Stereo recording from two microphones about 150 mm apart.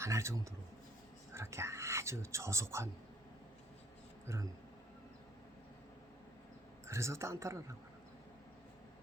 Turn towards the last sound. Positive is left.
turn(degrees=-20)  # may be behind; listen again after turning